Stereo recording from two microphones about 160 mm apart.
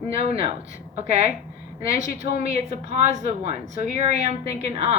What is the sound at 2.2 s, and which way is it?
Speech, 65° left (ahead or behind).